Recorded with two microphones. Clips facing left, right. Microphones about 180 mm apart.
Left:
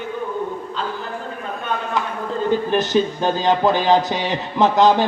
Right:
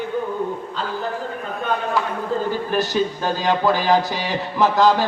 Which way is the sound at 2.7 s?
20° left (ahead or behind).